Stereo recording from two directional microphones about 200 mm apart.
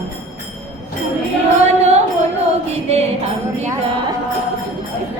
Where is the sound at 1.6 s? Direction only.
35° right (ahead or behind).